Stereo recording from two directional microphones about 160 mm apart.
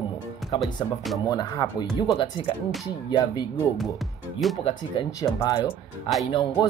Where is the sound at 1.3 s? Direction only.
25° left (ahead or behind).